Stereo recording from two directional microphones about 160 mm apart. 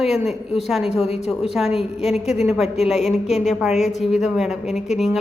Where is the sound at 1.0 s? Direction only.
40° left (ahead or behind).